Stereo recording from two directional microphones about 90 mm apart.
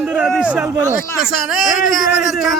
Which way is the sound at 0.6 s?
30° right (ahead or behind).